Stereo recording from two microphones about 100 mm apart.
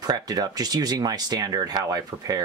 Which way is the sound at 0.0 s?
40° right (ahead or behind).